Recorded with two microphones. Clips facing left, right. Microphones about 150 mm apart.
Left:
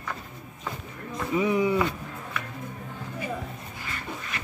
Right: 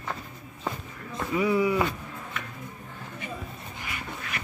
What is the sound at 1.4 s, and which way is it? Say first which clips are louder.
Speech: even; 20° left (ahead or behind).